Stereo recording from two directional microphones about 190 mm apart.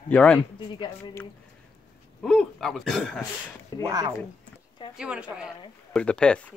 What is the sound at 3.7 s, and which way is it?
Speech, 20° left (ahead or behind).